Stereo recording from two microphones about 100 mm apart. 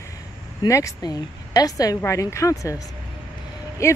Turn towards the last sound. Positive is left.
turn(degrees=30)  # may be behind; listen again after turning